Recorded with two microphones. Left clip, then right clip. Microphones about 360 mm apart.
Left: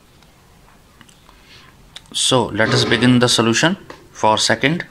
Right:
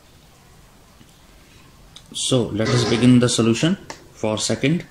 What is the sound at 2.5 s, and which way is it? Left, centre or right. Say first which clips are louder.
Speech: left 5 dB; centre.